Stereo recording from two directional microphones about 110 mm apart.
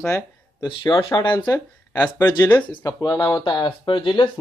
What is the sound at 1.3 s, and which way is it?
Speech, 15° left (ahead or behind).